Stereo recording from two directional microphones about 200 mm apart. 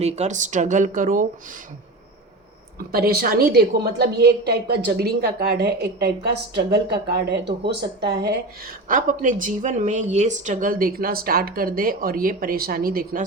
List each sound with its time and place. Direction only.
0.0 s speech: 35° right (ahead or behind)
2.7 s a woman's voice: 50° right (ahead or behind)